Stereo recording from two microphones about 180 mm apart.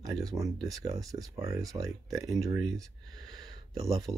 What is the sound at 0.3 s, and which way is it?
Speech, 20° right (ahead or behind).